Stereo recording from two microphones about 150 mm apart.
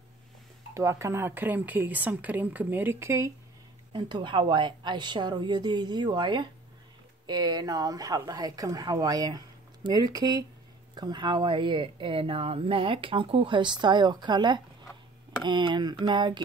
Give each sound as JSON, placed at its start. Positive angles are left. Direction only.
{"t": 0.7, "sound": "speech", "side_deg": -20}
{"t": 3.9, "sound": "speech", "side_deg": -30}